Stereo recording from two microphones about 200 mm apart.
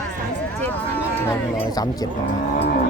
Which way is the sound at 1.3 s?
20° left (ahead or behind).